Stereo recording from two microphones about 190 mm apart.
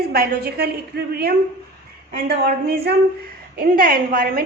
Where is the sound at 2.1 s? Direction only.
55° right (ahead or behind).